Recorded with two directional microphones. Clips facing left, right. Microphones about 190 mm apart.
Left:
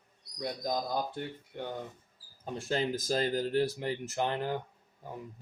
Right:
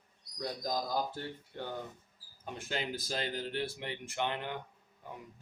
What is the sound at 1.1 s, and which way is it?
Speech, 20° left (ahead or behind).